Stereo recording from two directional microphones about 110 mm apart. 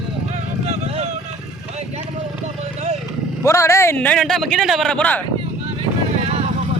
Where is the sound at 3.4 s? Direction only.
25° left (ahead or behind).